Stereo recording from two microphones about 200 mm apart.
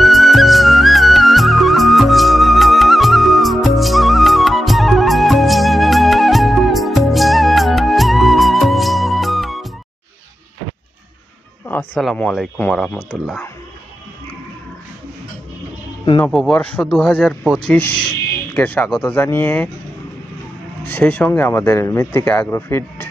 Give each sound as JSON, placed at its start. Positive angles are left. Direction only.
{"t": 0.0, "sound": "music", "side_deg": 0}
{"t": 11.6, "sound": "speech", "side_deg": 10}
{"t": 16.2, "sound": "speech", "side_deg": 5}
{"t": 20.8, "sound": "speech", "side_deg": 10}